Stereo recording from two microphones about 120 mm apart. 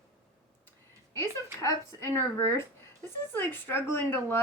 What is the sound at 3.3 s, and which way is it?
A woman's voice, 20° left (ahead or behind).